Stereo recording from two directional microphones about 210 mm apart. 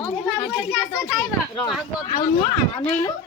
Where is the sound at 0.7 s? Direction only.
5° left (ahead or behind).